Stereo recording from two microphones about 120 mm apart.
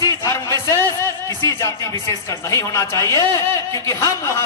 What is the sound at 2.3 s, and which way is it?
Speech, 25° left (ahead or behind).